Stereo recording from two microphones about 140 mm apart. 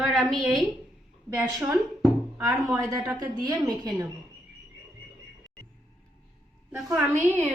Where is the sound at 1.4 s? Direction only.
20° right (ahead or behind).